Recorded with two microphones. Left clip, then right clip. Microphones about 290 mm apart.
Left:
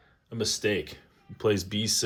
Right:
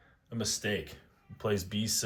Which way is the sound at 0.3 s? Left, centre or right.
Centre.